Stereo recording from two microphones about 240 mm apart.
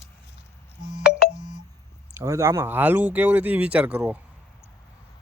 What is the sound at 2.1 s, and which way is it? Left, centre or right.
Speech, centre.